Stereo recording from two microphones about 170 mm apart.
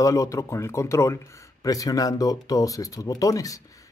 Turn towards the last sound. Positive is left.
turn(degrees=20)  # may be behind; listen again after turning